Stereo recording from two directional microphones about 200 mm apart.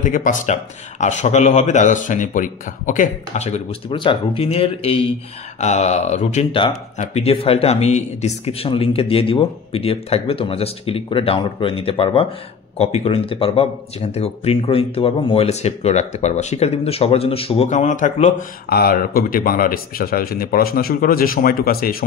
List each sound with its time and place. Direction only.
0.0 s speech: 40° left (ahead or behind)
18.7 s speech: 50° left (ahead or behind)